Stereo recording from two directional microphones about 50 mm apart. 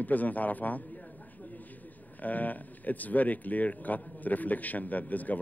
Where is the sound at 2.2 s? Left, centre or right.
Left.